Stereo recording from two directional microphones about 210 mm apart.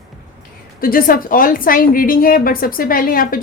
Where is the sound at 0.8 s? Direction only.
45° left (ahead or behind).